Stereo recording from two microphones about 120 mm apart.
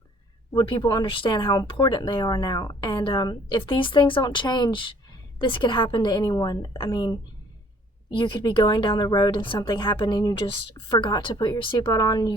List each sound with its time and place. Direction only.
0.5 s a woman's voice: 40° left (ahead or behind)
10.4 s a woman's voice: 50° left (ahead or behind)